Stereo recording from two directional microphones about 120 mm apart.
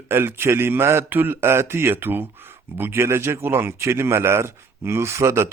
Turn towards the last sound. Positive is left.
turn(degrees=-25)  # may be behind; listen again after turning